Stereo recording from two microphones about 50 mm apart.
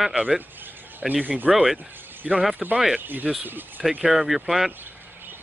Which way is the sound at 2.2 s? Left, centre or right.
Centre.